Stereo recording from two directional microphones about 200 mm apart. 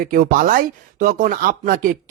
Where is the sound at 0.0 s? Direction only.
45° right (ahead or behind).